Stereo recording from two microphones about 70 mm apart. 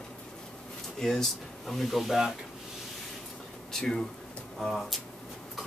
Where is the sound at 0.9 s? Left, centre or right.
Centre.